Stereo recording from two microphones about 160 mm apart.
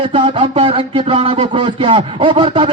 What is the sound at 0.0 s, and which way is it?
A man's voice, 30° right (ahead or behind).